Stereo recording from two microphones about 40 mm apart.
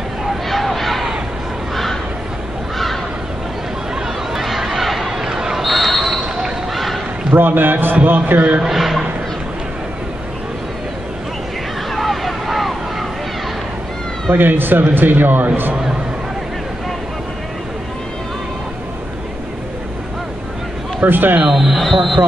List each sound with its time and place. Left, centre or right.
0.5 s a sound: centre
3.9 s chatter: centre
5.1 s a sound: centre
5.7 s basketball bounce: centre
6.2 s basketball bounce: centre
7.3 s a man's voice: right
8.4 s a man's voice: right
8.6 s speech: centre
11.9 s vehicle: centre
14.3 s a man's voice: right
21.0 s a man's voice: right
21.5 s speech: centre